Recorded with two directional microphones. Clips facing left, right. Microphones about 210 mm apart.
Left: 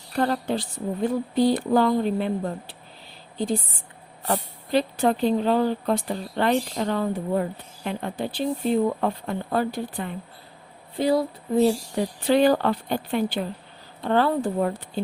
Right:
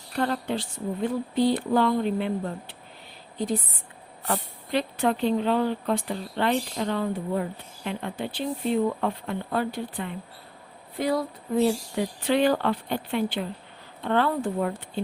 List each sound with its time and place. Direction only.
0.2 s speech: 40° left (ahead or behind)
3.3 s speech: 30° left (ahead or behind)
10.9 s speech: 30° left (ahead or behind)
11.9 s speech: 40° left (ahead or behind)